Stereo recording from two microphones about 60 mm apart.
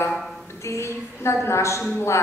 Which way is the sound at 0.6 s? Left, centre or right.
Left.